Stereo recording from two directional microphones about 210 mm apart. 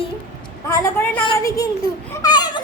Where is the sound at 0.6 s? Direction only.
15° left (ahead or behind).